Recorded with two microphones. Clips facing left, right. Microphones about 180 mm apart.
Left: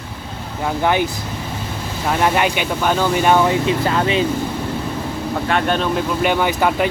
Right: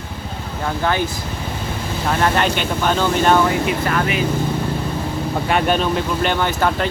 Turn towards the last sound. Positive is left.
turn(degrees=10)  # may be behind; listen again after turning